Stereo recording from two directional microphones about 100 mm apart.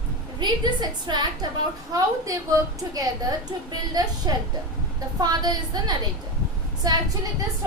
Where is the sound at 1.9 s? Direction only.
35° right (ahead or behind).